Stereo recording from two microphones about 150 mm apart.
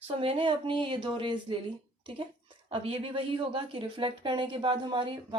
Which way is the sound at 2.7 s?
35° right (ahead or behind).